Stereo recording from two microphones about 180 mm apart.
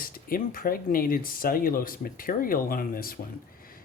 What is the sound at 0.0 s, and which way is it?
Speech, 55° left (ahead or behind).